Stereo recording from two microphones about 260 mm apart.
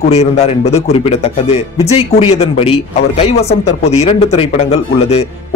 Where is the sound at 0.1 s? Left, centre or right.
Left.